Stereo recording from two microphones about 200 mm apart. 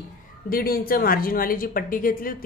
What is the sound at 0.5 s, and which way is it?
A woman's voice, 50° left (ahead or behind).